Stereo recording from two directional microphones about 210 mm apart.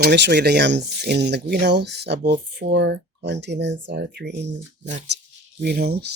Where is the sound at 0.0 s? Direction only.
55° right (ahead or behind).